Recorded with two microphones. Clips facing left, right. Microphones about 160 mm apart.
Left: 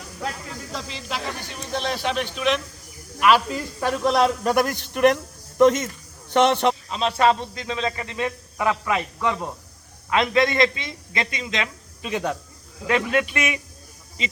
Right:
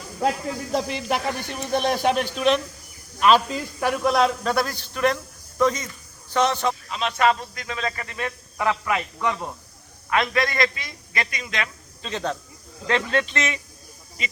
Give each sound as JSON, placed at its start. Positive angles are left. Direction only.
{"t": 0.7, "sound": "speech", "side_deg": -60}
{"t": 3.2, "sound": "speech", "side_deg": -20}
{"t": 3.8, "sound": "speech", "side_deg": -10}
{"t": 4.4, "sound": "a man's voice", "side_deg": 15}
{"t": 6.3, "sound": "speech", "side_deg": 60}
{"t": 6.8, "sound": "a man's voice", "side_deg": 30}